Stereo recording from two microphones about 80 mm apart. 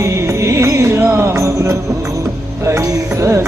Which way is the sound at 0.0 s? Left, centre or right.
Right.